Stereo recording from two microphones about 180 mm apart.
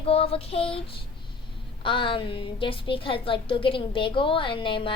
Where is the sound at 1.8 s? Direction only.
30° left (ahead or behind).